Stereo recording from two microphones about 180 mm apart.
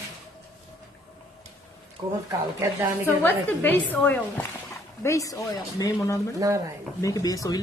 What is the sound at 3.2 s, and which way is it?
A woman's voice, 10° left (ahead or behind).